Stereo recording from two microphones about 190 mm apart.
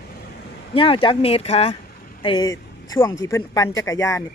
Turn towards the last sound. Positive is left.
turn(degrees=15)  # may be behind; listen again after turning